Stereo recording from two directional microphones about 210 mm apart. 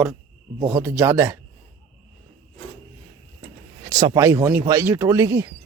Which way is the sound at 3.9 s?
20° right (ahead or behind).